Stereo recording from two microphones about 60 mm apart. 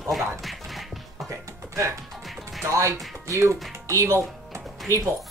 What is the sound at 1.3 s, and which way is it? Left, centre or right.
Music, right.